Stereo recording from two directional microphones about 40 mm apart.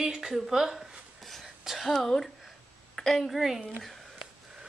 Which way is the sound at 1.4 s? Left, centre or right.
Centre.